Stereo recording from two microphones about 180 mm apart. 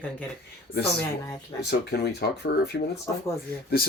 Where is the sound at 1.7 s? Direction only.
65° left (ahead or behind).